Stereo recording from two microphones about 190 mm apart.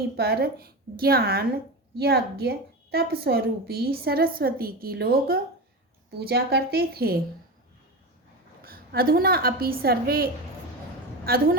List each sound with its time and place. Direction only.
0.2 s a woman's voice: 55° right (ahead or behind)
8.6 s a woman's voice: 50° right (ahead or behind)